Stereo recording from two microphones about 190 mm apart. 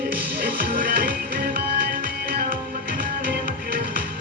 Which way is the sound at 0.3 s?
50° right (ahead or behind).